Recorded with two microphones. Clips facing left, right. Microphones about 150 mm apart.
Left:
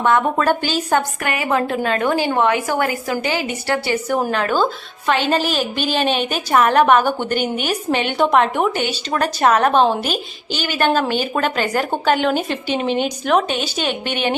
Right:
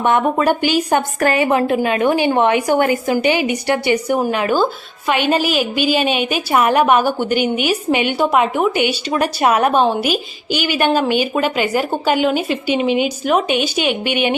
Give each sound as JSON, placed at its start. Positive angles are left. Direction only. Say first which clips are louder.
{"t": 0.0, "sound": "a woman's voice", "louder": "right 1 dB", "side_deg": -20}
{"t": 1.2, "sound": "a woman's voice", "louder": "right 8 dB", "side_deg": -30}
{"t": 1.5, "sound": "a woman's voice", "louder": "right 3 dB", "side_deg": -20}